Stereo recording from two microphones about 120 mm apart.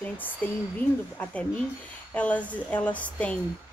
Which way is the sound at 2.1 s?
10° left (ahead or behind).